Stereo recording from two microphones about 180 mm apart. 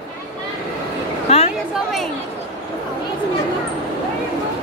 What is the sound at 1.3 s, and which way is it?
Chatter, 35° left (ahead or behind).